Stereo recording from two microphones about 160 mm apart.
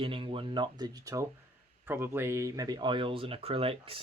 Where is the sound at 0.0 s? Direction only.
35° right (ahead or behind).